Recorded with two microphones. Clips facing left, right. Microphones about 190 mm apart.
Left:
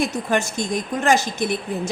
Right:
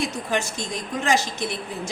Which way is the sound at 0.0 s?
50° left (ahead or behind).